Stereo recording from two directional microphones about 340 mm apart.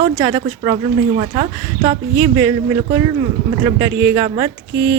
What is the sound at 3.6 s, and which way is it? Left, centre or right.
Speech, centre.